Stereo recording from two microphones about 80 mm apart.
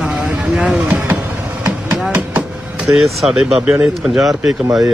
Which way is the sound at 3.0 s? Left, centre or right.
Centre.